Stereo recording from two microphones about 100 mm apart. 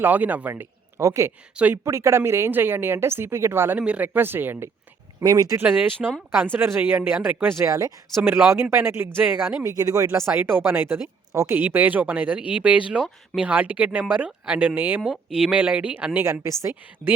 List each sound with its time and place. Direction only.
0.0 s a woman's voice: 15° right (ahead or behind)
1.5 s speech: 15° right (ahead or behind)
1.8 s a woman's voice: 30° right (ahead or behind)
3.8 s a woman's voice: 10° right (ahead or behind)
5.2 s speech: 40° right (ahead or behind)
5.5 s a woman's voice: 20° right (ahead or behind)
7.6 s speech: 35° right (ahead or behind)
8.2 s a woman's voice: 20° right (ahead or behind)
9.6 s a woman's voice: 35° right (ahead or behind); by 16.2 s 15° right (ahead or behind)
16.2 s a woman's voice: 25° right (ahead or behind)